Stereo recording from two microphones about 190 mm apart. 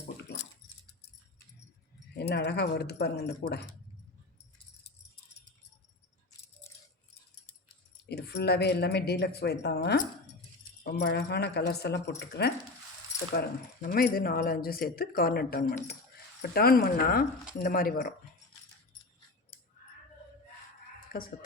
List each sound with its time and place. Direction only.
2.1 s speech: 60° left (ahead or behind)
8.0 s speech: 60° left (ahead or behind)
13.8 s speech: 50° left (ahead or behind)
21.1 s speech: 50° left (ahead or behind)